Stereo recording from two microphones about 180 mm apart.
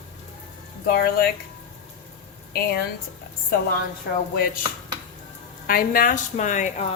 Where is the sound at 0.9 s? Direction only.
60° left (ahead or behind).